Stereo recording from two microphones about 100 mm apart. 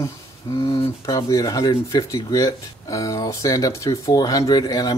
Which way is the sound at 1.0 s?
35° left (ahead or behind).